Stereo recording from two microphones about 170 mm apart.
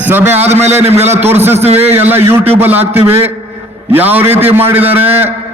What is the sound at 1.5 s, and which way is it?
Speech, 40° right (ahead or behind).